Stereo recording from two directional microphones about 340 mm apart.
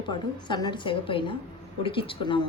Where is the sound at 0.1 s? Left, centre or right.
Centre.